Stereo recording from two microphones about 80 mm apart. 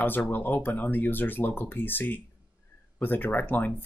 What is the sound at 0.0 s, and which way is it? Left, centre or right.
Speech, left.